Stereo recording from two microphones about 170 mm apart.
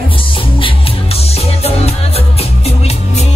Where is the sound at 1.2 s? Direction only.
35° left (ahead or behind).